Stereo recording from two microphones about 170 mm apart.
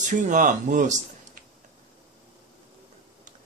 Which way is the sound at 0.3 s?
50° right (ahead or behind).